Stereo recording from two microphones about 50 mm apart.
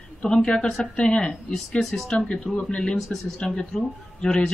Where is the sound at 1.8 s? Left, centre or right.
Centre.